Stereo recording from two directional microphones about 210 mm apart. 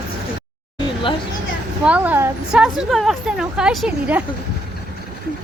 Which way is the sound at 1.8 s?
10° right (ahead or behind).